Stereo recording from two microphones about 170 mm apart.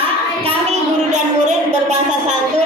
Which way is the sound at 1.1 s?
45° right (ahead or behind).